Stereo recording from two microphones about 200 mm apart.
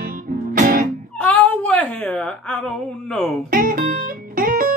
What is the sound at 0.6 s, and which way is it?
Music, 45° right (ahead or behind).